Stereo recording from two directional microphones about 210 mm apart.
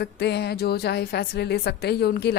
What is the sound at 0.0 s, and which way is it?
Speech, 50° left (ahead or behind).